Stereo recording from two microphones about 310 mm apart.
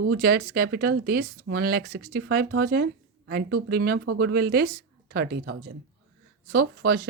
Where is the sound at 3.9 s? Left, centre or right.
Right.